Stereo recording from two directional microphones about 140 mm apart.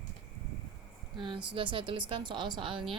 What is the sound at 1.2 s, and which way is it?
A woman's voice, 35° right (ahead or behind).